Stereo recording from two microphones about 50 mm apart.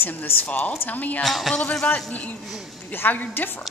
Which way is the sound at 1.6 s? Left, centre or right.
Centre.